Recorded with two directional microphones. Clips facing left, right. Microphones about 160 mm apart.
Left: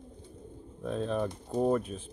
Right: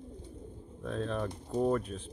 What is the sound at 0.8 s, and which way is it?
Speech, 5° left (ahead or behind).